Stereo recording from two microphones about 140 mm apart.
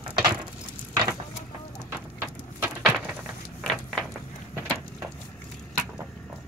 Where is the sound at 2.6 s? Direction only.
10° right (ahead or behind).